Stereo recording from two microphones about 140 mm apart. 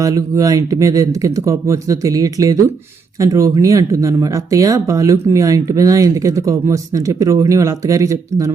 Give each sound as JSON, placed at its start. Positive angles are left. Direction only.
{"t": 0.0, "sound": "speech", "side_deg": -25}